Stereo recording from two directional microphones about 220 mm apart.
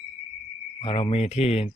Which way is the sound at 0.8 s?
25° left (ahead or behind).